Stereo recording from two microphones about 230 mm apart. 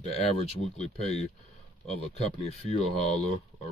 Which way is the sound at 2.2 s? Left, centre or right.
Left.